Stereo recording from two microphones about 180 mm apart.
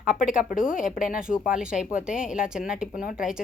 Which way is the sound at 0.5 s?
50° left (ahead or behind).